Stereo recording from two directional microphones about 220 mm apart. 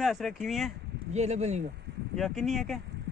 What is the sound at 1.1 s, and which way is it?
Speech, 30° right (ahead or behind).